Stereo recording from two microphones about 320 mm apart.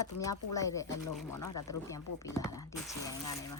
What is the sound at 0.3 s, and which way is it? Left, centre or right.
Speech, centre.